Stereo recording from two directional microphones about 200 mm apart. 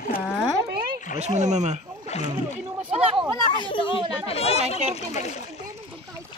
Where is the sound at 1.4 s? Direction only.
35° right (ahead or behind).